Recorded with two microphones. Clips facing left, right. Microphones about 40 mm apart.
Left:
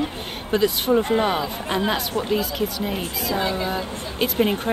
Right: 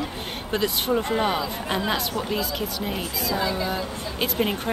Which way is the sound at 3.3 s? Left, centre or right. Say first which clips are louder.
Left 2 dB; left.